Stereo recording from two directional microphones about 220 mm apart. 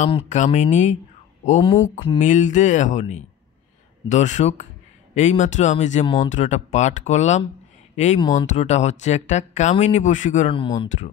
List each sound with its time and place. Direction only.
0.0 s speech: 30° left (ahead or behind)